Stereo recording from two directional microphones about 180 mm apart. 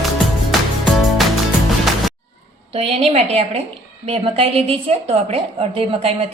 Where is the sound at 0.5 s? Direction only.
Centre (ahead or behind).